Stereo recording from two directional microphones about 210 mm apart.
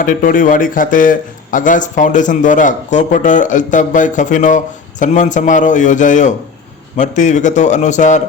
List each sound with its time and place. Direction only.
0.0 s a man's voice: 40° left (ahead or behind)